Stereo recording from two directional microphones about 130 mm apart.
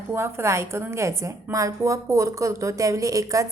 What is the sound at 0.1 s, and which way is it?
A woman's voice, 20° right (ahead or behind).